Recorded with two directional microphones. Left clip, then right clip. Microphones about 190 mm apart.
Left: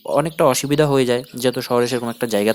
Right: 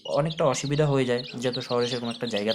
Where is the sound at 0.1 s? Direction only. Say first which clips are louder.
Left 8 dB; 45° left (ahead or behind).